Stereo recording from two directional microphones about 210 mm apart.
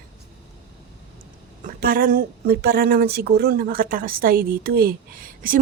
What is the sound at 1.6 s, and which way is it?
Speech, 45° right (ahead or behind).